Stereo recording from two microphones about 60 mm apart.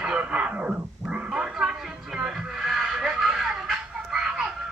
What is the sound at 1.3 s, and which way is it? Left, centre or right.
Music, centre.